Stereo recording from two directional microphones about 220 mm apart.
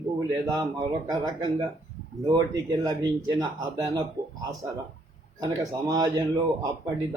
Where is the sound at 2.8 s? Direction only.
15° right (ahead or behind).